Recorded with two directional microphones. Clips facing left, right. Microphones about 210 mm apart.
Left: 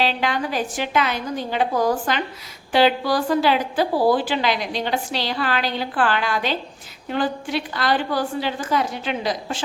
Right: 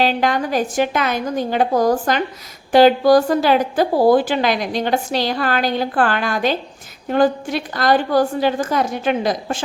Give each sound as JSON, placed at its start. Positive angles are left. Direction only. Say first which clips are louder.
{"t": 0.0, "sound": "a woman's voice", "louder": "right 5 dB", "side_deg": -45}